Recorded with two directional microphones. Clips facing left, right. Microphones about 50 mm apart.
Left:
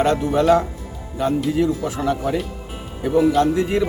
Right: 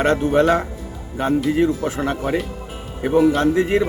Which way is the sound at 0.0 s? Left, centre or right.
Right.